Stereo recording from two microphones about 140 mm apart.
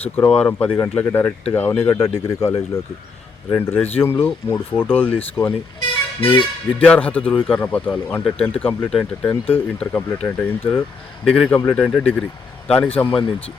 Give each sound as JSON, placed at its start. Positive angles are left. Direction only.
{"t": 0.0, "sound": "speech", "side_deg": 10}
{"t": 3.5, "sound": "speech", "side_deg": 15}